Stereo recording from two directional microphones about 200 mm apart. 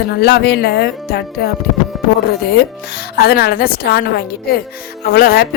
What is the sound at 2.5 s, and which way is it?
A woman's voice, 50° left (ahead or behind).